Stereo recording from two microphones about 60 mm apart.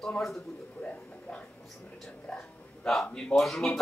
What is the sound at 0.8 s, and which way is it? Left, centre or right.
Speech, centre.